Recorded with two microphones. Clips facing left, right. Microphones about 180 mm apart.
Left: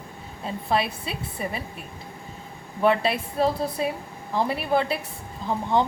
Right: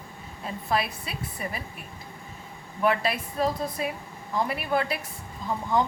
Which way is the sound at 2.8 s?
30° left (ahead or behind).